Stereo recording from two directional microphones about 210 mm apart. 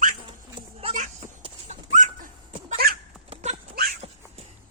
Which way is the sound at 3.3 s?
35° right (ahead or behind).